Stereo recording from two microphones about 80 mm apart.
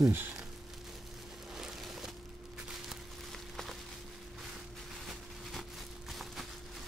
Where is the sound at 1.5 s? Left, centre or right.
Centre.